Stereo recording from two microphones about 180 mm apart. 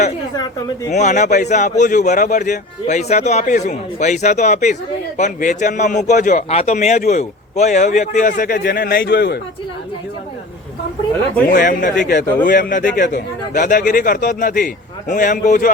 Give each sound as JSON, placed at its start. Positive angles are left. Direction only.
{"t": 0.9, "sound": "speech", "side_deg": 40}
{"t": 9.0, "sound": "a man's voice", "side_deg": 70}
{"t": 11.4, "sound": "speech", "side_deg": 50}